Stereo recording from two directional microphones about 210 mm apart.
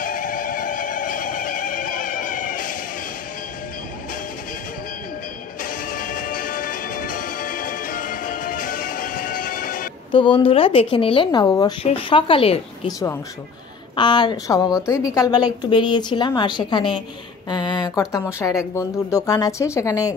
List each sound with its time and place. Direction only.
0.0 s neigh: 40° left (ahead or behind)
5.6 s music: 40° left (ahead or behind)
10.1 s speech: 25° left (ahead or behind)
13.9 s speech: 20° left (ahead or behind)